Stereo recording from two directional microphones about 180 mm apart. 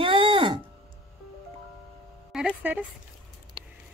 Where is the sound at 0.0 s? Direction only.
30° right (ahead or behind).